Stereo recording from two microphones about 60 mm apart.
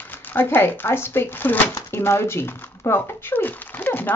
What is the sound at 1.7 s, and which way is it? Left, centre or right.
Speech, left.